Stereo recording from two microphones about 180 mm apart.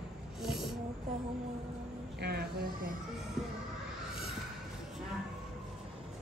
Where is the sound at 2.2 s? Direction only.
60° right (ahead or behind).